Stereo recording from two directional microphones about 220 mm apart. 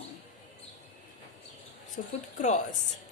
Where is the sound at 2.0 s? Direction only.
35° left (ahead or behind).